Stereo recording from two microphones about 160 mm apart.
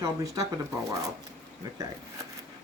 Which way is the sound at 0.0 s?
20° right (ahead or behind).